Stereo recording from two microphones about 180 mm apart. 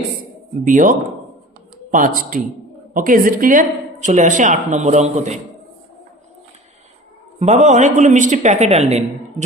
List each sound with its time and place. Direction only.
0.6 s a woman's voice: 45° right (ahead or behind)
7.3 s a woman's voice: 40° right (ahead or behind)